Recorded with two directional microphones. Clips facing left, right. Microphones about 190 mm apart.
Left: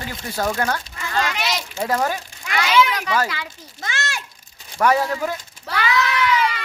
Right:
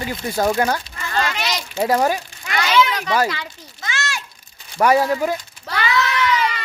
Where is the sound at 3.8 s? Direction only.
55° left (ahead or behind).